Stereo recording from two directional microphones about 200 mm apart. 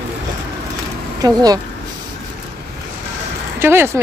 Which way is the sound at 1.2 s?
20° right (ahead or behind).